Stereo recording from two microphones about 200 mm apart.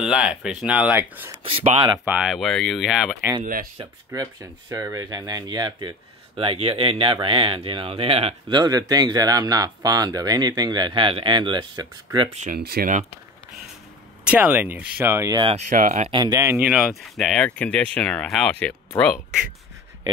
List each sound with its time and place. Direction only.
0.0 s speech: 5° right (ahead or behind)
1.4 s speech: 25° right (ahead or behind)
2.0 s speech: 5° right (ahead or behind)
3.7 s speech: 15° right (ahead or behind)
12.4 s speech: 45° right (ahead or behind)
14.2 s speech: 5° right (ahead or behind)
15.5 s speech: 40° right (ahead or behind); by 19.1 s 5° left (ahead or behind)